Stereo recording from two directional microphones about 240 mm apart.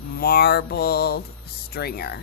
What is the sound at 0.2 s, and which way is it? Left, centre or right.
A woman's voice, left.